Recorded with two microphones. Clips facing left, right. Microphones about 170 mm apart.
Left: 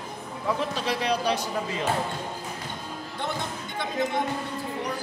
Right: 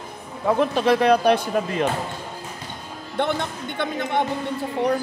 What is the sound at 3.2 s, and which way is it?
Speech, 65° right (ahead or behind).